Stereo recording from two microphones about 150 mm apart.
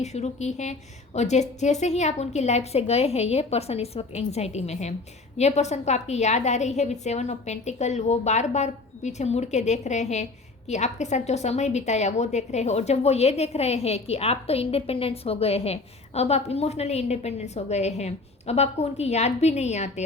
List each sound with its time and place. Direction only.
0.0 s a woman's voice: 50° left (ahead or behind)